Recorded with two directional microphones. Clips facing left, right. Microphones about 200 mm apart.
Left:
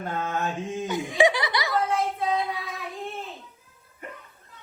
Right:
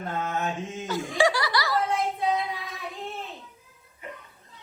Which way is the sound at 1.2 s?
20° left (ahead or behind).